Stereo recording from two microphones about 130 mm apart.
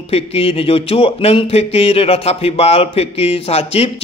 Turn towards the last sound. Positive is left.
turn(degrees=50)  # may be behind; listen again after turning